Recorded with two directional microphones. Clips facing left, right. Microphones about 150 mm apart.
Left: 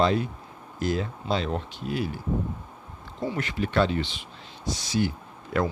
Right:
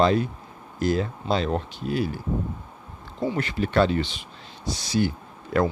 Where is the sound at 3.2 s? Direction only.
30° right (ahead or behind).